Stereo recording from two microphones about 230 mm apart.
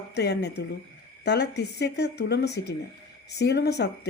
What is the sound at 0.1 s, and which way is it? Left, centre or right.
Speech, left.